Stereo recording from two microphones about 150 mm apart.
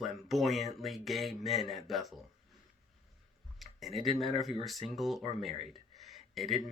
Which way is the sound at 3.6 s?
Centre (ahead or behind).